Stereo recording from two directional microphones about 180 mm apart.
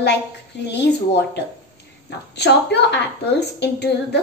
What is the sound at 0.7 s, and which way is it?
A woman's voice, 70° left (ahead or behind).